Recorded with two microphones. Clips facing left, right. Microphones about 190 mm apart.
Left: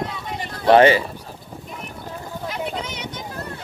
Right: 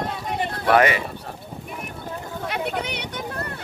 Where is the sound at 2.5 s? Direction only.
65° right (ahead or behind).